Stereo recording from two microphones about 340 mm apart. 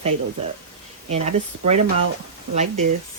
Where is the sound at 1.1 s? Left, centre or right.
Centre.